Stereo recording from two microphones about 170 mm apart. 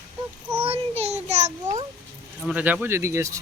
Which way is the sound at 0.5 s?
35° right (ahead or behind).